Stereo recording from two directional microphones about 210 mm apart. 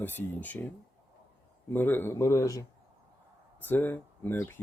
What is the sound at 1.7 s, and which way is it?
Speech, 10° left (ahead or behind).